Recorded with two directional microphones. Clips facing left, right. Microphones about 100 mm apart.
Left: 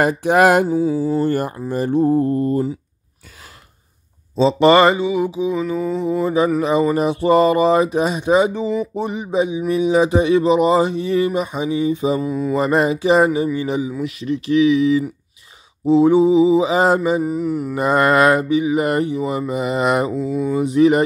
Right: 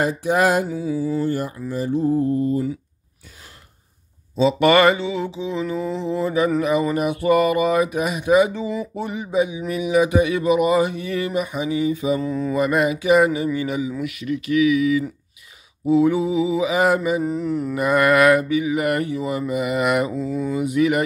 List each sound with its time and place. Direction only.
0.0 s mantra: 70° left (ahead or behind)
0.7 s mantra: 35° left (ahead or behind)
1.2 s mantra: 60° left (ahead or behind)
4.4 s mantra: 30° left (ahead or behind)
6.6 s speech: 25° left (ahead or behind)
12.2 s mantra: 10° left (ahead or behind)
12.5 s speech: 30° left (ahead or behind)
17.2 s mantra: 5° left (ahead or behind)
17.7 s speech: 30° left (ahead or behind)
20.2 s mantra: 5° left (ahead or behind)
20.5 s speech: 30° left (ahead or behind)